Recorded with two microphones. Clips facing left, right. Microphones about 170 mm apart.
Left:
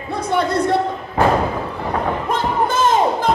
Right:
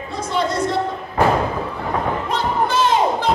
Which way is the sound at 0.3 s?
60° left (ahead or behind).